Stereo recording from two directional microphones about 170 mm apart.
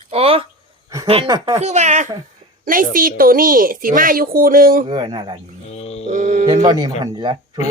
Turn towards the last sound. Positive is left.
turn(degrees=-25)  # may be behind; listen again after turning